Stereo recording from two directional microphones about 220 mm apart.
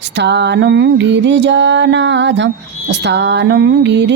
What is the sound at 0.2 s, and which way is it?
Music, 50° right (ahead or behind).